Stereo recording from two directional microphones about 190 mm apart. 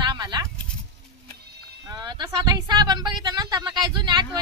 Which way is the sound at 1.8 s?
20° right (ahead or behind).